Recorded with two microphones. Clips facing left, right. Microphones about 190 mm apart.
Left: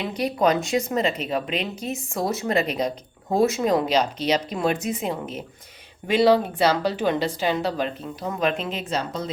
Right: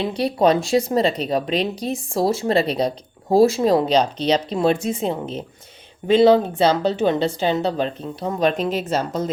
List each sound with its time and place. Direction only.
0.0 s speech: 30° right (ahead or behind); by 9.3 s 45° right (ahead or behind)